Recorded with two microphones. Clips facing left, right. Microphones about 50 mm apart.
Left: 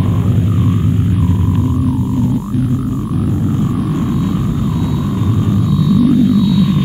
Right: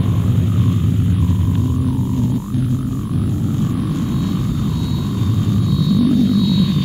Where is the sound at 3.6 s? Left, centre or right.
Left.